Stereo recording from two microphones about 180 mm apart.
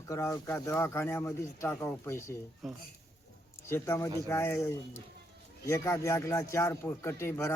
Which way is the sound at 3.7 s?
15° left (ahead or behind).